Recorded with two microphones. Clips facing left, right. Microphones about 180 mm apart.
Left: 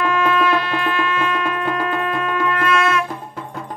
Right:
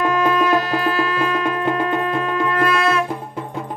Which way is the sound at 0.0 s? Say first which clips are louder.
Right 1 dB; 40° right (ahead or behind).